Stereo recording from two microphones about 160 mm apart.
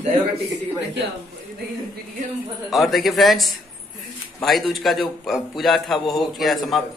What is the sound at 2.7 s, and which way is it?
A man's voice, centre (ahead or behind).